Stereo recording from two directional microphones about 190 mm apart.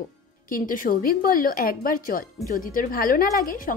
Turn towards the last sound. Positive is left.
turn(degrees=45)  # may be behind; listen again after turning